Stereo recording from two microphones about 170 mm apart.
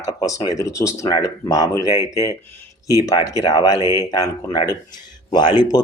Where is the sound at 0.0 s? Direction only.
20° left (ahead or behind).